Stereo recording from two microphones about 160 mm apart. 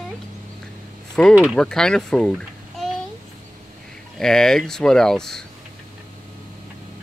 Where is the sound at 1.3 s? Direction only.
10° right (ahead or behind).